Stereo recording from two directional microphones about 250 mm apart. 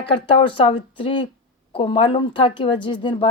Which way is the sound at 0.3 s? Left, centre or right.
Left.